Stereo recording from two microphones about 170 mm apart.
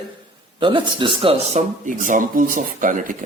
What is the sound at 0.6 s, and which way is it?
Speech, 30° right (ahead or behind).